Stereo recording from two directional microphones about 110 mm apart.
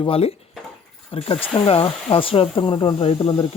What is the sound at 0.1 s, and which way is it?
Speech, 65° left (ahead or behind).